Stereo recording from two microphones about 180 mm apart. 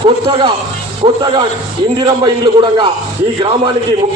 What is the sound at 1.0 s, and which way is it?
Speech, 30° right (ahead or behind).